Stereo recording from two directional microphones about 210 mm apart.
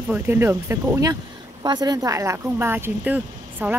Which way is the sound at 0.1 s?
10° right (ahead or behind).